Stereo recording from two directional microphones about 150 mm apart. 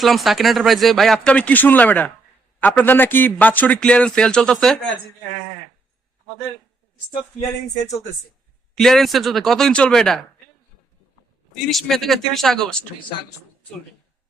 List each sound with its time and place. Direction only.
0.0 s a man's voice: centre (ahead or behind)
8.7 s speech: centre (ahead or behind)
11.6 s speech: centre (ahead or behind)